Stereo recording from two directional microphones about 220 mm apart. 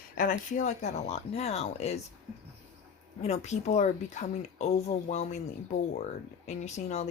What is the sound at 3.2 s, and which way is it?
A woman's voice, 30° left (ahead or behind).